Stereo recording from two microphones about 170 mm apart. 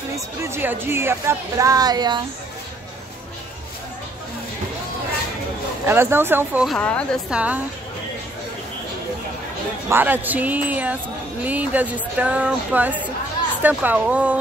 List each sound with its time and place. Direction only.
0.1 s a woman's voice: 15° right (ahead or behind)
5.9 s a woman's voice: 15° right (ahead or behind)
6.7 s a woman's voice: 5° left (ahead or behind)
7.2 s a woman's voice: 5° right (ahead or behind)
9.8 s a woman's voice: 10° right (ahead or behind)